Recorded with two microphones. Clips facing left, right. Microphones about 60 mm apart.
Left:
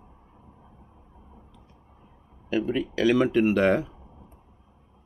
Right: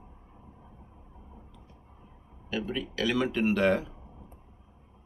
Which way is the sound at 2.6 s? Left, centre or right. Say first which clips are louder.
Left 7 dB; left.